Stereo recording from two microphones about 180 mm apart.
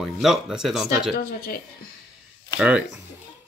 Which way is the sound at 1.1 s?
55° left (ahead or behind).